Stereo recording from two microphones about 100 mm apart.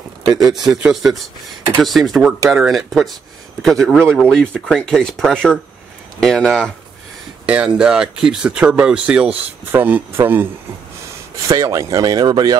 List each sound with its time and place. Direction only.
0.2 s a man's voice: 40° right (ahead or behind)
1.8 s speech: centre (ahead or behind)
7.4 s speech: 10° right (ahead or behind)
11.4 s speech: 35° right (ahead or behind)